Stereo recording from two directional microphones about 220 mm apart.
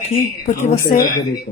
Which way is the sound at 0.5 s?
40° left (ahead or behind).